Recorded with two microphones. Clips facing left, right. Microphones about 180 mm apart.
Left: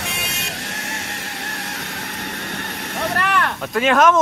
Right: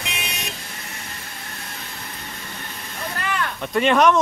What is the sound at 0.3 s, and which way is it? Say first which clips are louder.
Vehicle: left 3 dB; 80° left.